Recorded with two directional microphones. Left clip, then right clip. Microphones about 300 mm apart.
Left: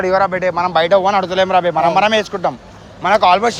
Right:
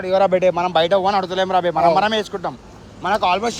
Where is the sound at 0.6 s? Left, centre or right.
Centre.